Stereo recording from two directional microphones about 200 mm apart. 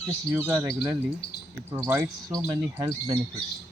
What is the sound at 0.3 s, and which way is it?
Speech, 10° right (ahead or behind).